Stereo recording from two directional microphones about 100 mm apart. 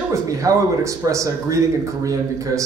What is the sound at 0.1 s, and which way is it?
A man's voice, 35° right (ahead or behind).